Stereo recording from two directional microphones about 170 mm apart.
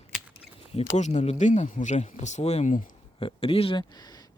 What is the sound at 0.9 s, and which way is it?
Speech, 45° left (ahead or behind).